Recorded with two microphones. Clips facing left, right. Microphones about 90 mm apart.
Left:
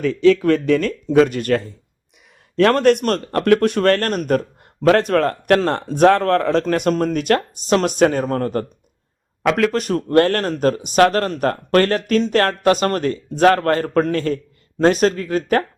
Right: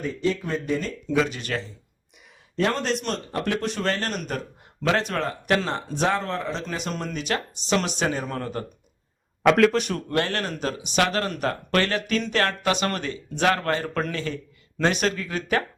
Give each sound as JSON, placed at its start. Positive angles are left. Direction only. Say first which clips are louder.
{"t": 0.0, "sound": "speech", "louder": "left 12 dB", "side_deg": 90}
{"t": 1.1, "sound": "speech", "louder": "left 10 dB", "side_deg": 50}
{"t": 2.6, "sound": "speech", "louder": "left 11 dB", "side_deg": 65}
{"t": 9.4, "sound": "speech", "louder": "even", "side_deg": 0}
{"t": 9.8, "sound": "speech", "louder": "left 10 dB", "side_deg": 40}